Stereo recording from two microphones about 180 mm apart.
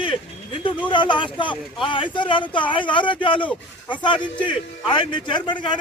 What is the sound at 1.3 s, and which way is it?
Speech, 25° left (ahead or behind).